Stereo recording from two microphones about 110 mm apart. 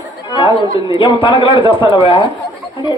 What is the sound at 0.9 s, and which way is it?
A man's voice, 50° left (ahead or behind).